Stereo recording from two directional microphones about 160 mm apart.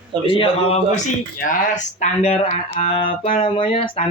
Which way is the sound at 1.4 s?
55° left (ahead or behind).